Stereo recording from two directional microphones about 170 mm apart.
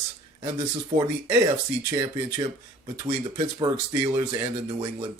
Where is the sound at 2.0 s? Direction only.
25° right (ahead or behind).